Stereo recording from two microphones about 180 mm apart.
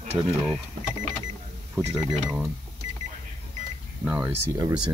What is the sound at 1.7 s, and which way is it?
Speech, 5° right (ahead or behind).